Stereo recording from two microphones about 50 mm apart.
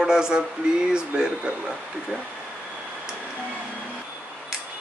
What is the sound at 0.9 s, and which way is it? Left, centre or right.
Speech, centre.